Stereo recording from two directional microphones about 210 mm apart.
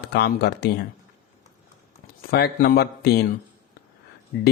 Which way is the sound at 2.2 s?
50° left (ahead or behind).